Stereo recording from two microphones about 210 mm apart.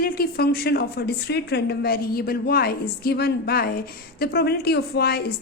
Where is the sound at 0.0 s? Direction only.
45° left (ahead or behind).